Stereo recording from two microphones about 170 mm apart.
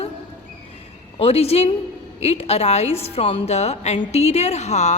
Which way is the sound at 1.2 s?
35° left (ahead or behind).